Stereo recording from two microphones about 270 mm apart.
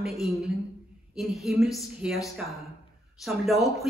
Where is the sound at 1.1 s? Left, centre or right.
Centre.